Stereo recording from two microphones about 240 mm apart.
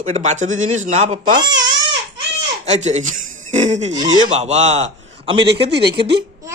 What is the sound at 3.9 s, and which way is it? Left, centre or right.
Speech, centre.